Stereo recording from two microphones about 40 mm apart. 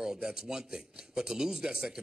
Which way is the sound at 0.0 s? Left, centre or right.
Centre.